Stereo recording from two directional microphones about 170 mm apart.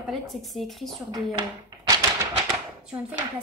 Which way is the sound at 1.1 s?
25° right (ahead or behind).